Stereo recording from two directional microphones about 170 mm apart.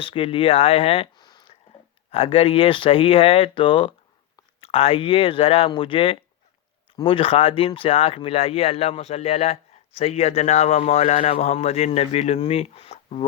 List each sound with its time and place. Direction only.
0.0 s a man's voice: 35° left (ahead or behind)